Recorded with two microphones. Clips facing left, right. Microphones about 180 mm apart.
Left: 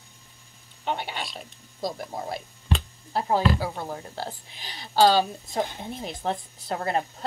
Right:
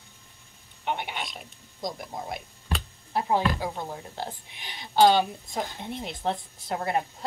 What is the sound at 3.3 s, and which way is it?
A woman's voice, 20° right (ahead or behind).